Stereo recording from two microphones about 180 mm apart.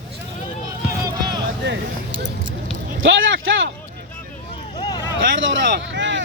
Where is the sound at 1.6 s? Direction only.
75° right (ahead or behind).